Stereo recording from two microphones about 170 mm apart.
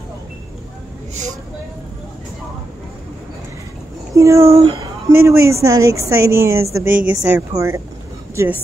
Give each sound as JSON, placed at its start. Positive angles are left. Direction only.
{"t": 4.1, "sound": "speech", "side_deg": -20}
{"t": 4.5, "sound": "speech", "side_deg": -35}
{"t": 5.1, "sound": "speech", "side_deg": -15}